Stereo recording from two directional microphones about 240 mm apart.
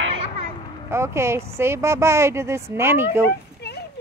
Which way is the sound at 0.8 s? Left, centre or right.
Centre.